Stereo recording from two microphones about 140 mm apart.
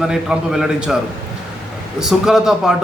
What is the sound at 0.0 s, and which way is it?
Speech, 5° right (ahead or behind).